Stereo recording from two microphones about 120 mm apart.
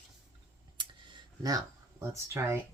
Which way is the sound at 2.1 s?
20° right (ahead or behind).